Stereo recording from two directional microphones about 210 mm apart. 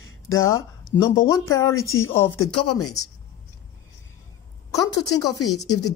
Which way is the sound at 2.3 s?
90° left.